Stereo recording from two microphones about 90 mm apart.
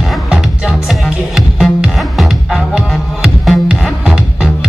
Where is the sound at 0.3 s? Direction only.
5° right (ahead or behind).